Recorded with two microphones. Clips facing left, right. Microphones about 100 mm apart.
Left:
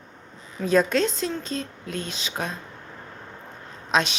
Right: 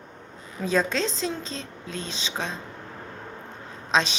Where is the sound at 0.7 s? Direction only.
Centre (ahead or behind).